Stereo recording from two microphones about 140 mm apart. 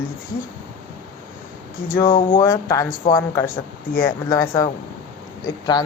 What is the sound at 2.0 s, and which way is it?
Speech, 35° left (ahead or behind).